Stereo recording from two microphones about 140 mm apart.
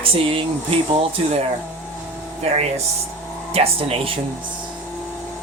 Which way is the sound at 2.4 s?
50° right (ahead or behind).